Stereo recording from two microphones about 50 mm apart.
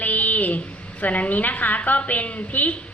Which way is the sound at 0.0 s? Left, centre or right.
Left.